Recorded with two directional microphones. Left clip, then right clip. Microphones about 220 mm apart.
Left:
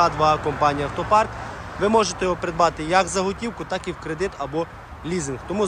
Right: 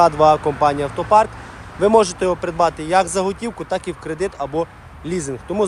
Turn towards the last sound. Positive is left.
turn(degrees=0)  # may be behind; listen again after turning